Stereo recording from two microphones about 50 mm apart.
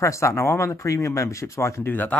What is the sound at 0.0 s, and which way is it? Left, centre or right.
Speech, left.